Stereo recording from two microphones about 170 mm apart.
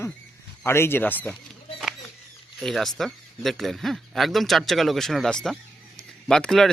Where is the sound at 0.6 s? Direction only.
15° left (ahead or behind).